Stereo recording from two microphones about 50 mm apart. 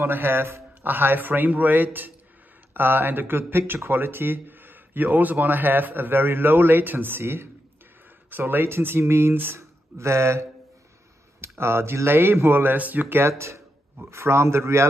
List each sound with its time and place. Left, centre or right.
0.0 s a man's voice: right
9.6 s speech: right
11.4 s speech: right
12.7 s a man's voice: right
14.1 s a man's voice: right